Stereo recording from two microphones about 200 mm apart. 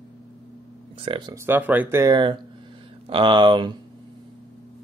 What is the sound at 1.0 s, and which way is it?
Speech, 25° right (ahead or behind).